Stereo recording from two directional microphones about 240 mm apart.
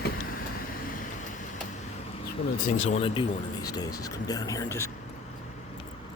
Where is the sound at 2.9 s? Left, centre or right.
Left.